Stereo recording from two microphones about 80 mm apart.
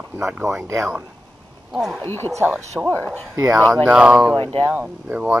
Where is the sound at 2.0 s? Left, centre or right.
Left.